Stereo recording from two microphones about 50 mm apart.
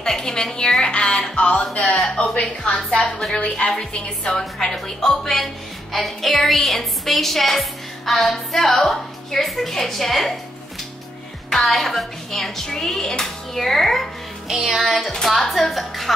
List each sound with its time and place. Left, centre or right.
0.0 s speech: centre
3.0 s speech: centre
3.3 s a woman's voice: left; by 10.3 s centre
11.5 s speech: centre
14.5 s music: centre
14.8 s a woman's voice: centre